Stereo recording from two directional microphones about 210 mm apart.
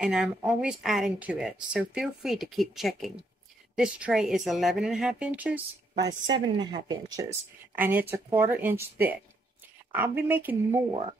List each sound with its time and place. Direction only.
0.0 s speech: 5° right (ahead or behind)
5.9 s speech: 20° right (ahead or behind)